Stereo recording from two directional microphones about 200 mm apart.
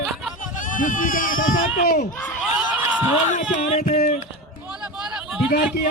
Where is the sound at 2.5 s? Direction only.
10° right (ahead or behind).